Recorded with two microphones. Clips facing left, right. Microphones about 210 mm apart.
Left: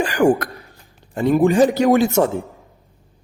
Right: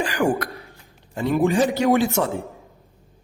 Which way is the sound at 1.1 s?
50° left (ahead or behind).